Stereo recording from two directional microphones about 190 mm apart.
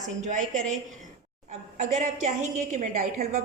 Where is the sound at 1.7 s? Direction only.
40° right (ahead or behind).